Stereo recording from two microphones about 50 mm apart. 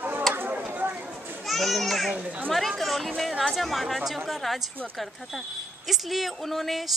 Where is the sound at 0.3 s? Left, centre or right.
Right.